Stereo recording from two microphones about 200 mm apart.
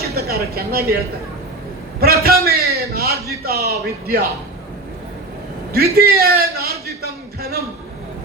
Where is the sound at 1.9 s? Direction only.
50° right (ahead or behind).